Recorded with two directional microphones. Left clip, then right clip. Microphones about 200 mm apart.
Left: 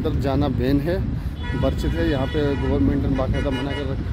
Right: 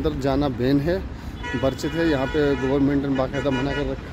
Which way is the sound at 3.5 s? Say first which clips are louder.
Right 2 dB; 35° right (ahead or behind).